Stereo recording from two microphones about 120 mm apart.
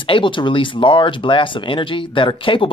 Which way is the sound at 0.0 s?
45° left (ahead or behind).